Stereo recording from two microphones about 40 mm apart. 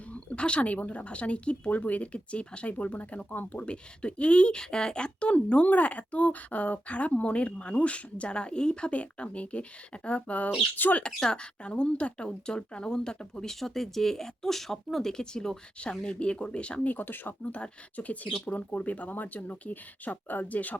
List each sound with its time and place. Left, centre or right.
0.1 s speech: left
1.7 s speech: left
3.2 s speech: left
3.5 s speech: left
5.6 s speech: left
11.0 s speech: left
15.1 s speech: centre
16.8 s speech: left
17.4 s speech: left